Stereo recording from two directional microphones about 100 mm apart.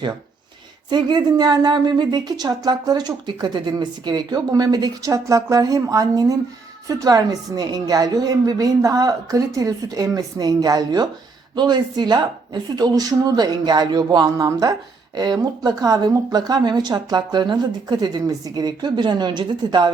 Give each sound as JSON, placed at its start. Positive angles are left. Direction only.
{"t": 0.9, "sound": "a woman's voice", "side_deg": -50}